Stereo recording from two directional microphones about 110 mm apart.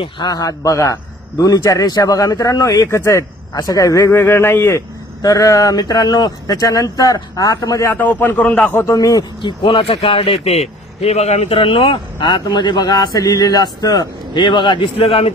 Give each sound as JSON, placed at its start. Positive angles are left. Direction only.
{"t": 0.0, "sound": "a man's voice", "side_deg": 40}
{"t": 7.9, "sound": "a man's voice", "side_deg": 15}
{"t": 8.8, "sound": "speech", "side_deg": 30}
{"t": 9.4, "sound": "speech", "side_deg": 50}